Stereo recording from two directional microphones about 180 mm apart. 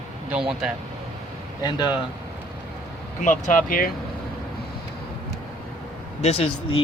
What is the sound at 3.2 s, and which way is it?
Speech, 45° left (ahead or behind).